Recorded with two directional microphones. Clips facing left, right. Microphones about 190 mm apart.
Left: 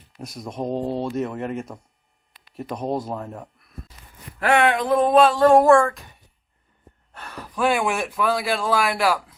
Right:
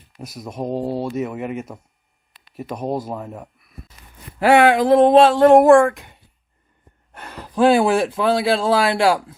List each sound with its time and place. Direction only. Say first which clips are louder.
0.2 s speech: right 1 dB; centre (ahead or behind)
4.7 s a sound: right 6 dB; 30° right (ahead or behind)
7.1 s speech: right 3 dB; 20° right (ahead or behind)